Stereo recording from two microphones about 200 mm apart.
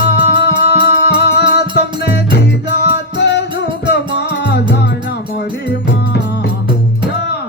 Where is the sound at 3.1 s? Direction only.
60° left (ahead or behind).